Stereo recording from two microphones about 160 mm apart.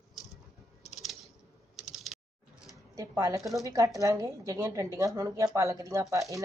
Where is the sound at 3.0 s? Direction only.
20° right (ahead or behind).